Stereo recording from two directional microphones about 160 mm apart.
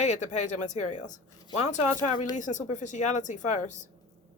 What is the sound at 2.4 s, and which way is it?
Speech, 50° left (ahead or behind).